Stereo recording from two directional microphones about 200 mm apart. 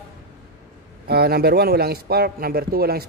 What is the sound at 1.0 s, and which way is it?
A man's voice, 50° right (ahead or behind).